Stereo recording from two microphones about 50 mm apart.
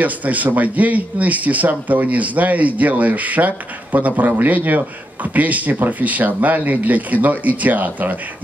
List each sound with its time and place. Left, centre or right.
0.0 s speech: right